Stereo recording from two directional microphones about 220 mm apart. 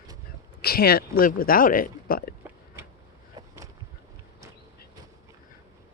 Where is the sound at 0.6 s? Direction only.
45° left (ahead or behind).